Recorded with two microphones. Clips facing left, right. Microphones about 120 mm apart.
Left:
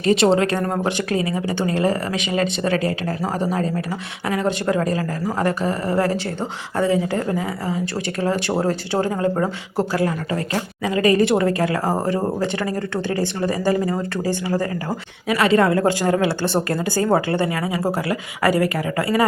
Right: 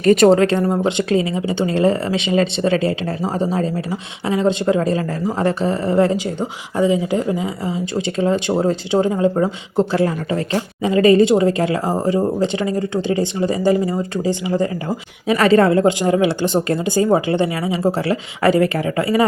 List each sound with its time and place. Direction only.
0.0 s speech: 50° right (ahead or behind)
0.9 s speech: 25° right (ahead or behind)
15.4 s speech: 35° right (ahead or behind)
15.9 s speech: 20° right (ahead or behind)